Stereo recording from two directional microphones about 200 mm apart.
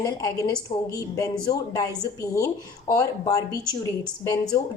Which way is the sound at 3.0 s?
15° left (ahead or behind).